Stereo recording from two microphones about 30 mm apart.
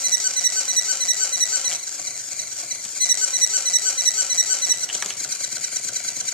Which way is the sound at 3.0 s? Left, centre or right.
Left.